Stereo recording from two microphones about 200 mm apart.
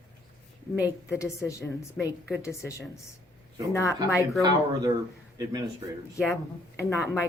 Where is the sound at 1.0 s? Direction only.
15° left (ahead or behind).